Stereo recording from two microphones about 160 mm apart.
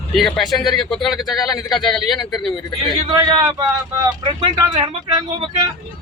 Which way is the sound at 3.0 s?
30° right (ahead or behind).